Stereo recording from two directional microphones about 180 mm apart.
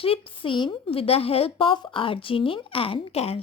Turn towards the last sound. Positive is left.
turn(degrees=35)  # may be behind; listen again after turning